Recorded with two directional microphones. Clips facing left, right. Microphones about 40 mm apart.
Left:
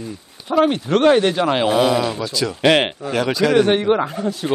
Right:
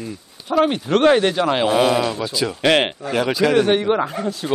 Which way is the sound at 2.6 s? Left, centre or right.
Centre.